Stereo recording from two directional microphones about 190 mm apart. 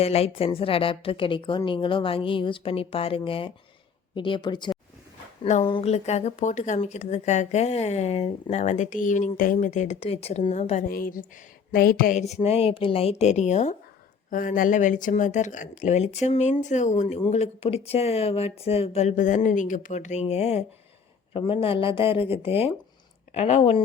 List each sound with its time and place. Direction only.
0.0 s a woman's voice: 30° left (ahead or behind)
10.8 s a woman's voice: 50° left (ahead or behind); by 23.8 s 30° left (ahead or behind)